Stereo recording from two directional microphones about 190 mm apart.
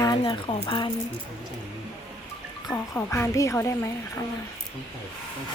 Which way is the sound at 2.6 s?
15° left (ahead or behind).